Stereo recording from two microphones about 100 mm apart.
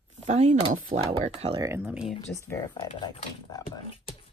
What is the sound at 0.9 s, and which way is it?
Speech, 90° right.